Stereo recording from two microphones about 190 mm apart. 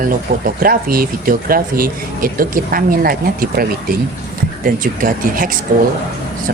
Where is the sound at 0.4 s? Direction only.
50° right (ahead or behind).